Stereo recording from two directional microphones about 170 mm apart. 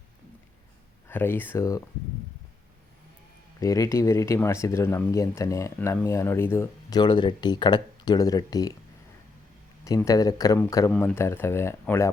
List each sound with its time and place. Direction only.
1.0 s speech: 15° left (ahead or behind)
3.6 s speech: 20° left (ahead or behind)
7.0 s speech: 25° left (ahead or behind)
9.8 s speech: 20° left (ahead or behind)